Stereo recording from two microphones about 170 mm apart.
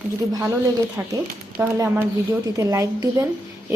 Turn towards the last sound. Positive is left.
turn(degrees=-20)  # may be behind; listen again after turning